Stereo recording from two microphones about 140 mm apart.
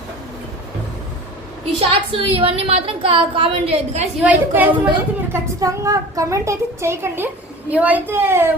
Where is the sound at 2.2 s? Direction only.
45° right (ahead or behind).